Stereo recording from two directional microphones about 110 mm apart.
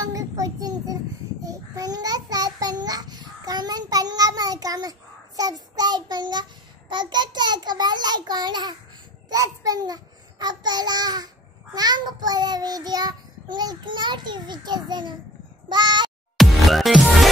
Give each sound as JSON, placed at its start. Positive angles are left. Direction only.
{"t": 0.0, "sound": "child singing", "side_deg": -30}
{"t": 6.9, "sound": "a sound", "side_deg": -45}
{"t": 9.3, "sound": "a child's voice", "side_deg": -30}
{"t": 11.7, "sound": "child singing", "side_deg": -40}
{"t": 16.3, "sound": "music", "side_deg": 0}